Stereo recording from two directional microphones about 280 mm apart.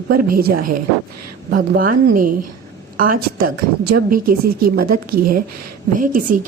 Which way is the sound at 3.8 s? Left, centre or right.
Right.